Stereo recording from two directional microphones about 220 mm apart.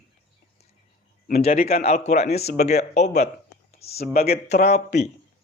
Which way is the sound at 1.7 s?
30° left (ahead or behind).